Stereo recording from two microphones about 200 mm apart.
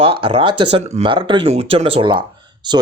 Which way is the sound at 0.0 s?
25° right (ahead or behind).